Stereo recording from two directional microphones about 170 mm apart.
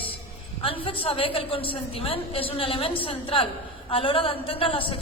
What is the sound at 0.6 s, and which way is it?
A woman's voice, 30° left (ahead or behind).